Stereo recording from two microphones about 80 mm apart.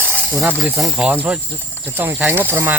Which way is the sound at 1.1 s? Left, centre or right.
Centre.